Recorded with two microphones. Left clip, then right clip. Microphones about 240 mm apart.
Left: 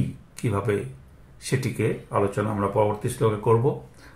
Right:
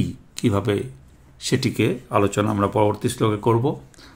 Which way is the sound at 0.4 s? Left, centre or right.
Right.